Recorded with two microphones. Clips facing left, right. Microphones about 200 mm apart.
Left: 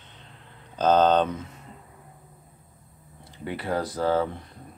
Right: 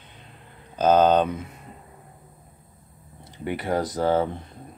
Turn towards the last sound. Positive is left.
turn(degrees=-20)  # may be behind; listen again after turning